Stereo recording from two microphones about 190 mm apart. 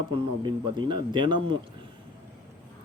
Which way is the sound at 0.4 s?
25° right (ahead or behind).